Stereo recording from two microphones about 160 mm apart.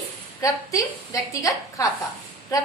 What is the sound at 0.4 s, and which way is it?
A woman's voice, 20° left (ahead or behind).